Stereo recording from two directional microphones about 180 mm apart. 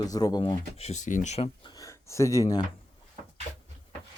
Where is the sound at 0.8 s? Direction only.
40° left (ahead or behind).